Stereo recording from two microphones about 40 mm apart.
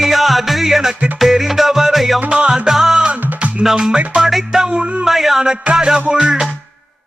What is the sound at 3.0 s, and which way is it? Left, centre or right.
Music, right.